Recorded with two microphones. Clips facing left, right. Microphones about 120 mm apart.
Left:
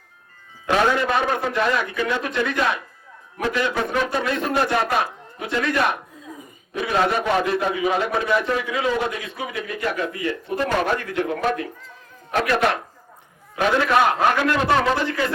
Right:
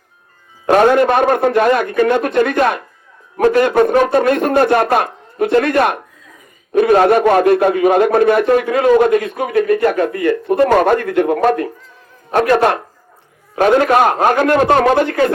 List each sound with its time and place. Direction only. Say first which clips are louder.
0.7 s a man's voice: right 9 dB; 50° right (ahead or behind)